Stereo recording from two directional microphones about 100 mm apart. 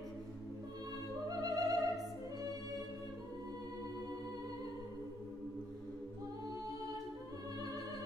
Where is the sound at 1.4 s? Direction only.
40° right (ahead or behind).